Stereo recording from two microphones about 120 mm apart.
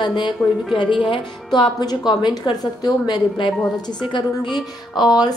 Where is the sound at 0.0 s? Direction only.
40° left (ahead or behind).